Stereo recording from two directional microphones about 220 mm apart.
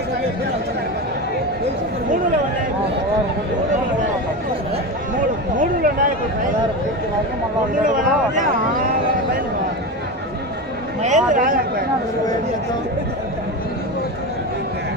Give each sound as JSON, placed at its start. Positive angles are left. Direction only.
{"t": 5.6, "sound": "a sound", "side_deg": -40}
{"t": 7.8, "sound": "speech", "side_deg": -35}
{"t": 11.0, "sound": "speech", "side_deg": -35}